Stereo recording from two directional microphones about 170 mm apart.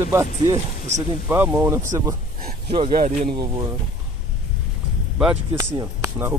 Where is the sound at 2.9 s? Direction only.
55° right (ahead or behind).